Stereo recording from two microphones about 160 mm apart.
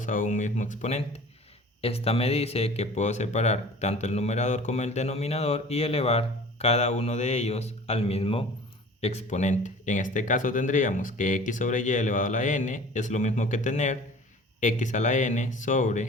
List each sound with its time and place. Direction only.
0.0 s speech: 55° left (ahead or behind)